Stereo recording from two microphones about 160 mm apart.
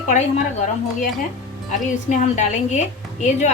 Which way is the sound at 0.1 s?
50° left (ahead or behind).